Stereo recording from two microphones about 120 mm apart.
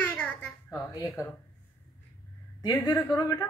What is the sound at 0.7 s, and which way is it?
Speech, 30° left (ahead or behind).